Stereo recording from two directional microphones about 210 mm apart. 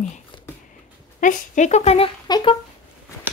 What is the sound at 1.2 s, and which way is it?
Speech, 35° left (ahead or behind).